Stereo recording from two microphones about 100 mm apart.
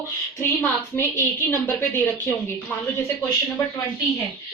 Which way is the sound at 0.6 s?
20° left (ahead or behind).